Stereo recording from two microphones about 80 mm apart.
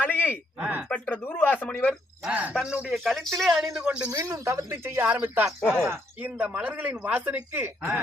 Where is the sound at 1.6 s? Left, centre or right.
Centre.